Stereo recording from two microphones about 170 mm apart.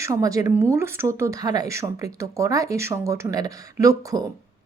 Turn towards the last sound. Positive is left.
turn(degrees=-20)  # may be behind; listen again after turning